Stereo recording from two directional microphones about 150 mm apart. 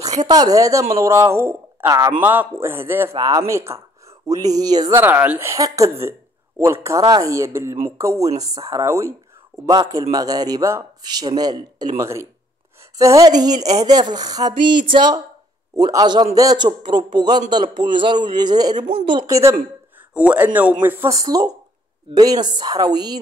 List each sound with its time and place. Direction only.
0.2 s a man's voice: 25° right (ahead or behind)
5.0 s a man's voice: 15° right (ahead or behind)
20.2 s a man's voice: 10° right (ahead or behind); by 23.1 s 25° right (ahead or behind)